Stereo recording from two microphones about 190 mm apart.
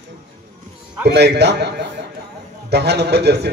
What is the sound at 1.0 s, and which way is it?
A man's voice, 60° right (ahead or behind).